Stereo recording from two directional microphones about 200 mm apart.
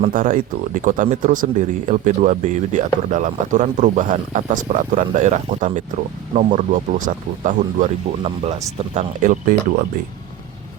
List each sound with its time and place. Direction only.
0.0 s speech: 40° right (ahead or behind)